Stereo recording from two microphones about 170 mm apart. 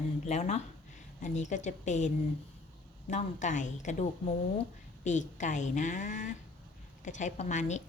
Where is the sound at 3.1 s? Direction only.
45° left (ahead or behind).